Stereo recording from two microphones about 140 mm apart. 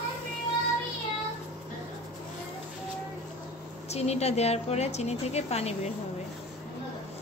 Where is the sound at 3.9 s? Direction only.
50° left (ahead or behind).